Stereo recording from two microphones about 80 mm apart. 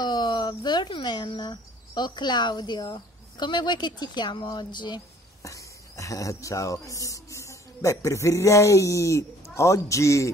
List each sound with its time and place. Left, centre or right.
0.0 s speech: left
5.4 s speech: left